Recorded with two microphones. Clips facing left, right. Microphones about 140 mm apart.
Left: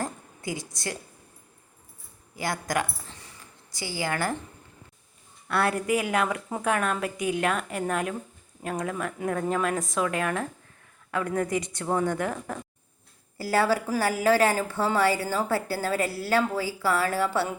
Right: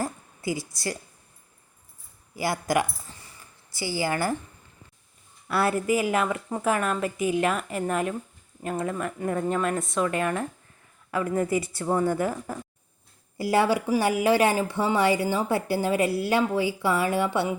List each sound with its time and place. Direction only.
0.0 s a sound: 5° right (ahead or behind)
0.7 s a woman's voice: centre (ahead or behind)
2.3 s a woman's voice: 10° right (ahead or behind)
5.5 s a woman's voice: 5° right (ahead or behind)
13.4 s a woman's voice: 20° right (ahead or behind)